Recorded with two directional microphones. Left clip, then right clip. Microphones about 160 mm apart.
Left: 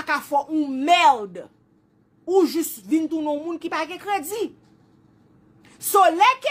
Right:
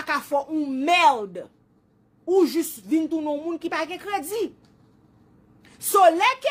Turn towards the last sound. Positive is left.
turn(degrees=15)  # may be behind; listen again after turning